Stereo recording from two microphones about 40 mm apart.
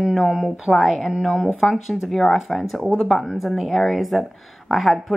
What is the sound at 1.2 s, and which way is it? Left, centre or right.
Speech, centre.